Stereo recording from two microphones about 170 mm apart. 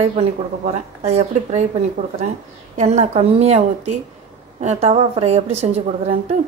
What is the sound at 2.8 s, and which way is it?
Speech, 45° right (ahead or behind).